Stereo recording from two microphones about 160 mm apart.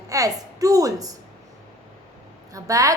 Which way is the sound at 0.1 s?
20° right (ahead or behind).